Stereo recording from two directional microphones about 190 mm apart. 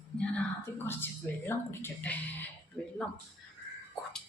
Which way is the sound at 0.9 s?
10° left (ahead or behind).